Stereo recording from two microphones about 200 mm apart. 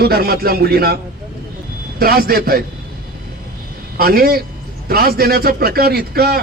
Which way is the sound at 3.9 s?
50° right (ahead or behind).